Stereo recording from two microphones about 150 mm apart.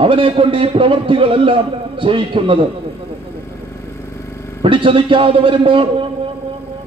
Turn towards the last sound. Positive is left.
turn(degrees=-35)  # may be behind; listen again after turning